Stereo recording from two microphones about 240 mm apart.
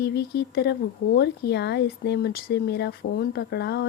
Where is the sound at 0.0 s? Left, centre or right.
Left.